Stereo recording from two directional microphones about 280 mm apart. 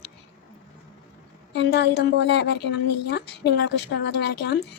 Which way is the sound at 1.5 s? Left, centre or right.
Left.